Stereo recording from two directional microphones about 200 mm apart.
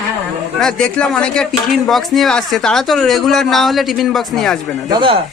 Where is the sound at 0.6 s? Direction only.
5° left (ahead or behind).